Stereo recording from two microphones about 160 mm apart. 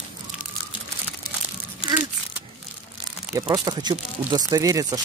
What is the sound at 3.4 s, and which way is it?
Speech, 25° right (ahead or behind).